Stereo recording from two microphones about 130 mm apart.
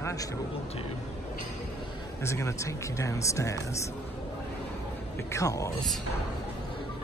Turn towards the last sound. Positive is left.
turn(degrees=25)  # may be behind; listen again after turning